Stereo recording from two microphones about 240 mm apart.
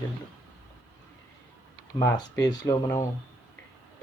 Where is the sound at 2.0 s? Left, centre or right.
Centre.